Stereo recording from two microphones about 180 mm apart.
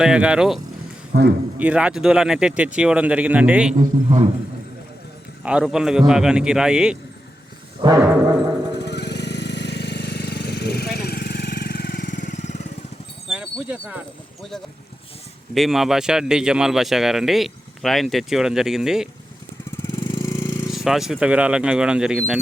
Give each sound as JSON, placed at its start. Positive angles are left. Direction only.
{"t": 0.0, "sound": "speech", "side_deg": -5}
{"t": 1.1, "sound": "a man's voice", "side_deg": -65}
{"t": 1.5, "sound": "speech", "side_deg": -5}
{"t": 3.8, "sound": "a man's voice", "side_deg": -40}
{"t": 5.5, "sound": "speech", "side_deg": -5}
{"t": 7.8, "sound": "music", "side_deg": -20}
{"t": 8.8, "sound": "jackhammer", "side_deg": 70}
{"t": 13.2, "sound": "a sound", "side_deg": -5}
{"t": 15.5, "sound": "speech", "side_deg": 0}
{"t": 19.7, "sound": "vehicle", "side_deg": 15}
{"t": 20.1, "sound": "a sound", "side_deg": 20}
{"t": 20.7, "sound": "speech", "side_deg": 0}